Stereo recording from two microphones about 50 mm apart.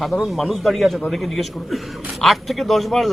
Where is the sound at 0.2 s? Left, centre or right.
Centre.